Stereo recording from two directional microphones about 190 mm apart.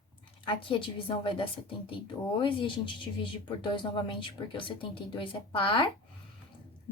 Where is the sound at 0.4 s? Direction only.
25° left (ahead or behind).